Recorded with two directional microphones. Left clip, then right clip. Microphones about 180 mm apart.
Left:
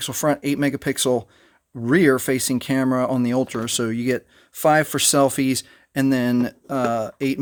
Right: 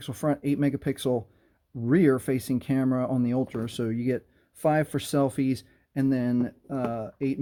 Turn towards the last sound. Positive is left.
turn(degrees=25)  # may be behind; listen again after turning